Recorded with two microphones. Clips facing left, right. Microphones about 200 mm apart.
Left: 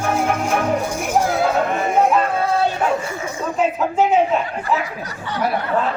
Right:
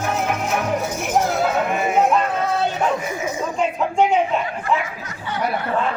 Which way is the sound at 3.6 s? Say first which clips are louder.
Left 1 dB; 5° left (ahead or behind).